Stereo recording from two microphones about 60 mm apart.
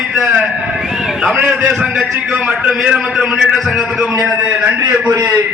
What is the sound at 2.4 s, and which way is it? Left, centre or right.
A man's voice, right.